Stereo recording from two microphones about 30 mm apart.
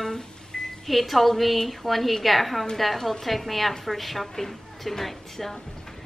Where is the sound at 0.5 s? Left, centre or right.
Left.